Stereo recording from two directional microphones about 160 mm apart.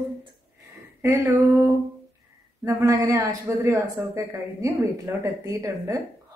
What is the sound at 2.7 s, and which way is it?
A woman's voice, 20° right (ahead or behind).